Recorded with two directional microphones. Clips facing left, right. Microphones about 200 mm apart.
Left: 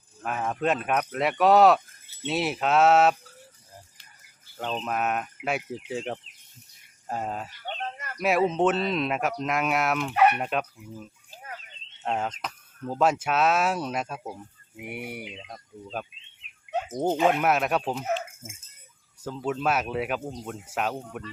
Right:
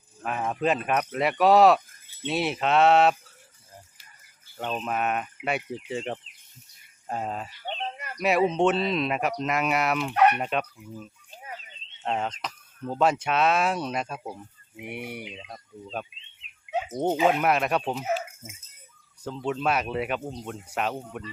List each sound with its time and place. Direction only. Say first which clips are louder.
0.2 s speech: right 1 dB; centre (ahead or behind)
4.9 s speech: even; centre (ahead or behind)
7.9 s a sound: even; 15° right (ahead or behind)
8.2 s speech: right 1 dB; centre (ahead or behind)
12.0 s speech: even; centre (ahead or behind)
19.2 s speech: even; 5° left (ahead or behind)